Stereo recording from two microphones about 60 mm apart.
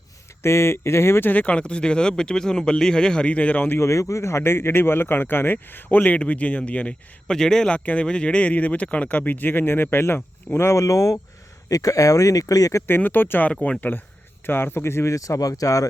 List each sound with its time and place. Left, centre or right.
0.4 s speech: left
1.3 s speech: left
3.7 s speech: left
7.3 s speech: centre
7.7 s speech: centre; by 11.2 s left
11.7 s speech: left
12.9 s speech: left
14.4 s speech: left
15.1 s speech: left